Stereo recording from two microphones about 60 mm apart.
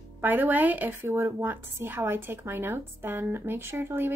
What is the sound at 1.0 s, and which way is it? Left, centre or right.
Speech, right.